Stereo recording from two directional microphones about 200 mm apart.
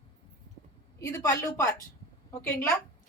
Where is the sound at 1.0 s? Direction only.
15° left (ahead or behind).